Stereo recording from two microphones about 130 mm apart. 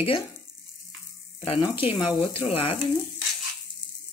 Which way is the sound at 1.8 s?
45° left (ahead or behind).